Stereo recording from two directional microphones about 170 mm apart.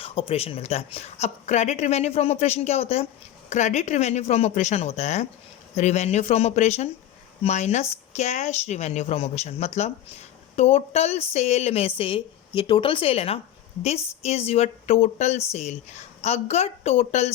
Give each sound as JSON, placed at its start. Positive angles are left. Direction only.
{"t": 0.0, "sound": "speech", "side_deg": 35}